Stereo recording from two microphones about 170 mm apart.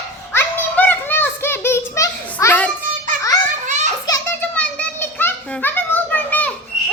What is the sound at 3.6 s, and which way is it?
Children playing, 45° right (ahead or behind).